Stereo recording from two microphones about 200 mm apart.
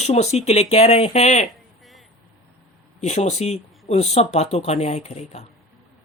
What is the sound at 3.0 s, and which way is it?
Speech, 35° left (ahead or behind).